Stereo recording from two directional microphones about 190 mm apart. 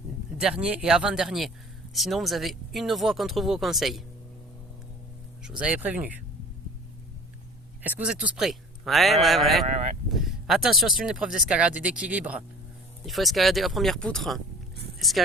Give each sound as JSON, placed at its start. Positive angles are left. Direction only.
{"t": 0.3, "sound": "speech", "side_deg": -5}
{"t": 5.4, "sound": "speech", "side_deg": -5}
{"t": 7.8, "sound": "speech", "side_deg": -10}
{"t": 9.6, "sound": "a sound", "side_deg": -35}
{"t": 10.1, "sound": "speech", "side_deg": 0}